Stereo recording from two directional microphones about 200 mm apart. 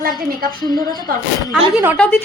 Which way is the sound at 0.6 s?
20° left (ahead or behind).